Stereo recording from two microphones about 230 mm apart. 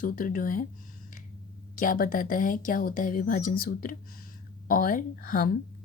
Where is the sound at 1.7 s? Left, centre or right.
Left.